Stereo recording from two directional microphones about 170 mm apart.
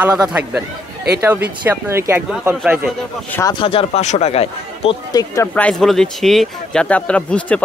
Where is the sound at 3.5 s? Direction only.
30° left (ahead or behind).